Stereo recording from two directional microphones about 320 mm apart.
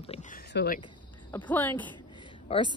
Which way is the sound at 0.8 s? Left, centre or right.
Centre.